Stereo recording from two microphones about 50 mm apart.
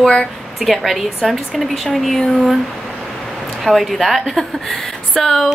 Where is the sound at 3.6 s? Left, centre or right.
Centre.